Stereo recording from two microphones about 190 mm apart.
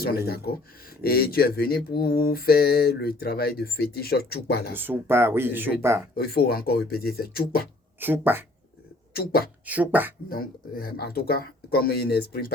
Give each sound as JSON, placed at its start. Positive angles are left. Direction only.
{"t": 0.3, "sound": "speech", "side_deg": 55}
{"t": 1.0, "sound": "mantra", "side_deg": 55}
{"t": 4.7, "sound": "speech", "side_deg": -10}
{"t": 6.1, "sound": "mantra", "side_deg": 55}
{"t": 7.9, "sound": "speech", "side_deg": -10}
{"t": 9.1, "sound": "mantra", "side_deg": 50}
{"t": 9.6, "sound": "speech", "side_deg": -10}
{"t": 10.2, "sound": "speech", "side_deg": 50}